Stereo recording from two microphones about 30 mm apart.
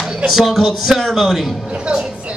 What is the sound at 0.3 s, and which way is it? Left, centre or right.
A man's voice, centre.